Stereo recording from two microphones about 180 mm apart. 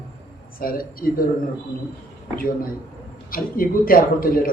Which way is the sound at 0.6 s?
55° left (ahead or behind).